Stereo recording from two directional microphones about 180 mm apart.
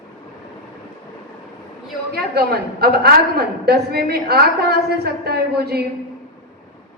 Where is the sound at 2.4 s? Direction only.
60° right (ahead or behind).